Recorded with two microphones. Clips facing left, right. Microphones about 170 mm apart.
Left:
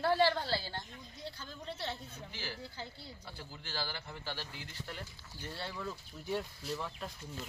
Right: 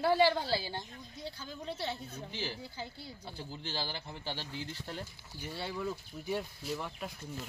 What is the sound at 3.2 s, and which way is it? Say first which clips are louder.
Speech: right 8 dB; 25° right (ahead or behind).